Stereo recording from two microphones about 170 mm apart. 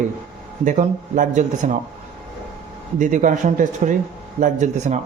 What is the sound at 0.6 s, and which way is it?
A man's voice, 45° right (ahead or behind).